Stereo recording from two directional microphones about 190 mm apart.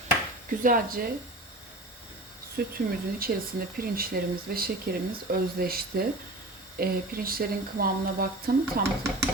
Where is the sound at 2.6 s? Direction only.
50° right (ahead or behind).